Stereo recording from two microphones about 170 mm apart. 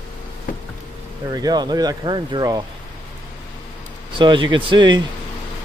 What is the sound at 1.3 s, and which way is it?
Speech, 25° right (ahead or behind).